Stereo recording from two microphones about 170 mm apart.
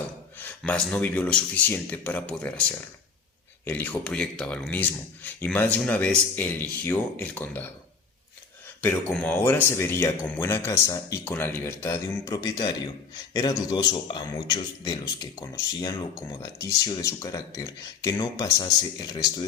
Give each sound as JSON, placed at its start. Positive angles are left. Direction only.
{"t": 0.3, "sound": "speech", "side_deg": 10}
{"t": 8.8, "sound": "speech", "side_deg": 5}